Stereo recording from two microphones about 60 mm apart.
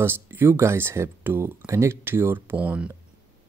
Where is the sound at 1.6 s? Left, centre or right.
Right.